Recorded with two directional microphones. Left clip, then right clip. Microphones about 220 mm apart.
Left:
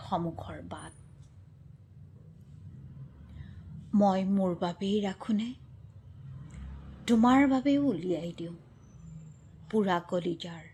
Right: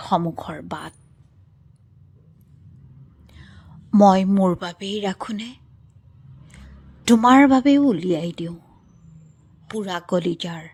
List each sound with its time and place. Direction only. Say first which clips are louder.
0.0 s a woman's voice: right 11 dB; 35° right (ahead or behind)
3.9 s a woman's voice: right 12 dB; 35° right (ahead or behind)
7.0 s a woman's voice: right 11 dB; 35° right (ahead or behind)
9.9 s a woman's voice: right 7 dB; 30° right (ahead or behind)